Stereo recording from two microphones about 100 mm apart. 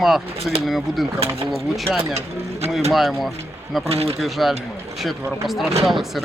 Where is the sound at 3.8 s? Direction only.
80° right.